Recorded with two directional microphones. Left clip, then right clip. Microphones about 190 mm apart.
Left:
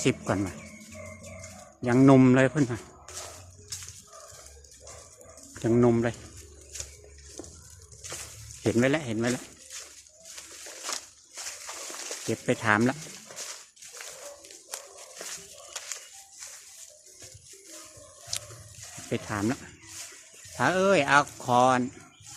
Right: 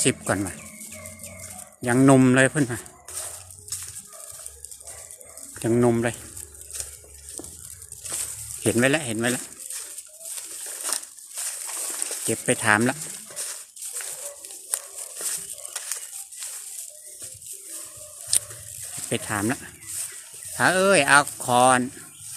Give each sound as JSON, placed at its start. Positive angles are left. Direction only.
{"t": 0.0, "sound": "speech", "side_deg": 0}
{"t": 1.8, "sound": "speech", "side_deg": 0}
{"t": 5.5, "sound": "speech", "side_deg": 0}
{"t": 8.6, "sound": "speech", "side_deg": -5}
{"t": 10.3, "sound": "crushing", "side_deg": -55}
{"t": 12.3, "sound": "speech", "side_deg": -5}
{"t": 13.0, "sound": "a sound", "side_deg": -55}
{"t": 14.7, "sound": "a sound", "side_deg": -55}
{"t": 18.3, "sound": "a sound", "side_deg": -10}
{"t": 19.1, "sound": "speech", "side_deg": -15}